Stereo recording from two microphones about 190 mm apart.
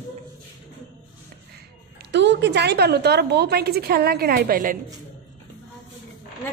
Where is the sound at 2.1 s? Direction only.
70° right (ahead or behind); by 4.7 s 50° right (ahead or behind).